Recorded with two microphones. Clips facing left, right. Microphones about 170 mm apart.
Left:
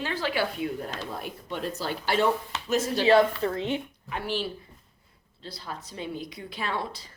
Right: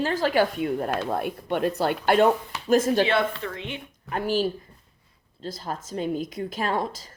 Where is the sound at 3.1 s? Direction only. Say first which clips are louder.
Left 5 dB; 35° left (ahead or behind).